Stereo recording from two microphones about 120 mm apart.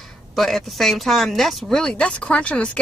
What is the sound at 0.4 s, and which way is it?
A woman's voice, centre (ahead or behind).